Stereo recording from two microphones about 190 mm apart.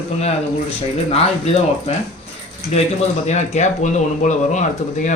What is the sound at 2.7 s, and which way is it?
Speech, 35° left (ahead or behind).